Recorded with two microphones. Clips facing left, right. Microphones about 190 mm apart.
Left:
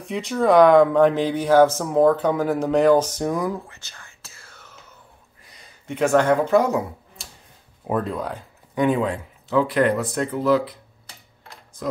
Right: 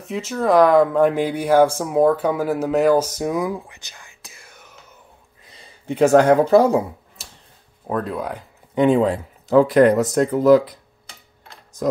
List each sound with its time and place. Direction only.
0.0 s speech: centre (ahead or behind)
5.4 s speech: 30° right (ahead or behind)
7.2 s tick-tock: centre (ahead or behind)
7.8 s speech: 10° left (ahead or behind)
8.1 s speech: 10° right (ahead or behind)
8.7 s speech: 30° right (ahead or behind)
11.7 s typing: 40° right (ahead or behind)